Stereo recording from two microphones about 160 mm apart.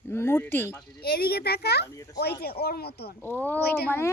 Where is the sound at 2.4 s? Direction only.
75° left (ahead or behind).